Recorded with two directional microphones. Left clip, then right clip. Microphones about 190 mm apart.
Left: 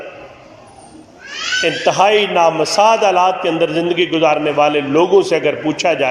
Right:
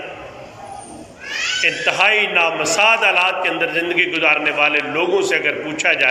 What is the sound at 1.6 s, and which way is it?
A man's voice, 30° left (ahead or behind).